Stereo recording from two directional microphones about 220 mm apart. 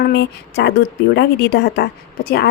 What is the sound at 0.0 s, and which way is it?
A woman's voice, 50° left (ahead or behind).